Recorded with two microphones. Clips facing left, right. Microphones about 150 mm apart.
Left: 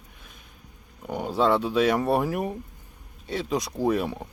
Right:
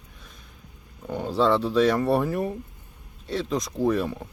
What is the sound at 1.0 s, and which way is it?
Speech, 15° left (ahead or behind).